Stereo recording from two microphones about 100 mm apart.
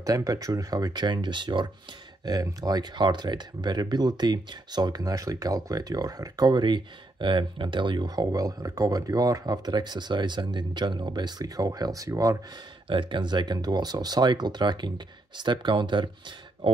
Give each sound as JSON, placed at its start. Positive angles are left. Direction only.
{"t": 0.0, "sound": "speech", "side_deg": -35}
{"t": 2.2, "sound": "speech", "side_deg": -40}
{"t": 12.8, "sound": "speech", "side_deg": -55}